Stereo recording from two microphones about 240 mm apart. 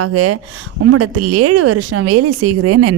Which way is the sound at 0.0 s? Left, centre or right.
Right.